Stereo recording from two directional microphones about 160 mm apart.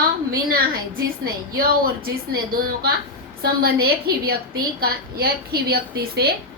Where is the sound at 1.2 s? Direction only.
65° right (ahead or behind).